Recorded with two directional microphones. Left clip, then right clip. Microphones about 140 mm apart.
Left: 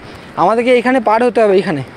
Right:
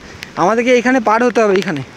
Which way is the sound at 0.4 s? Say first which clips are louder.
Left 1 dB; 40° right (ahead or behind).